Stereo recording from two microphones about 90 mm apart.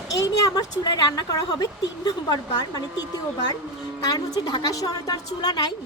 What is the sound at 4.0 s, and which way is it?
A woman's voice, 45° left (ahead or behind).